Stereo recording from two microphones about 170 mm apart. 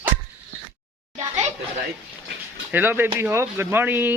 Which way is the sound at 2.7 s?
10° right (ahead or behind).